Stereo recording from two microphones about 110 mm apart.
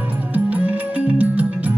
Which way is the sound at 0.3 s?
15° right (ahead or behind).